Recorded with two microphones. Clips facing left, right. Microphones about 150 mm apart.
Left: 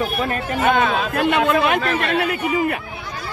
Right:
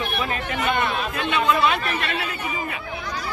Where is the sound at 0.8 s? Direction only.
90° left.